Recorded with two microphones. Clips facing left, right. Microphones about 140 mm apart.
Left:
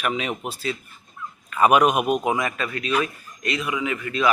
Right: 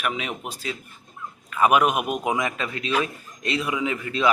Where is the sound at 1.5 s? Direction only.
5° right (ahead or behind).